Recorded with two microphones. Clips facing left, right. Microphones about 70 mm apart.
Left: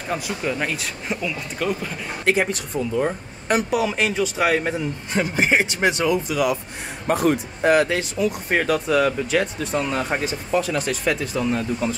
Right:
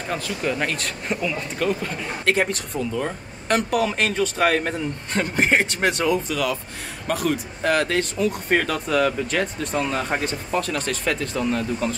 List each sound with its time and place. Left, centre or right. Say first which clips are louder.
0.1 s speech: left 2 dB; centre
0.4 s speech: even; centre
7.1 s a man's voice: left 4 dB; left
7.7 s speech: left 2 dB; centre